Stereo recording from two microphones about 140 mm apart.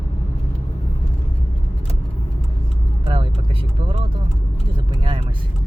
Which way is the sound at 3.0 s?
40° right (ahead or behind).